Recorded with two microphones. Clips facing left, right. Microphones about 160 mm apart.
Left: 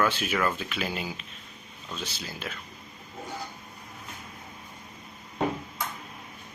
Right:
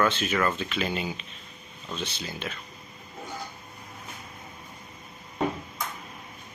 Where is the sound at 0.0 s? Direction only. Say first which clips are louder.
Right 1 dB; 10° left (ahead or behind).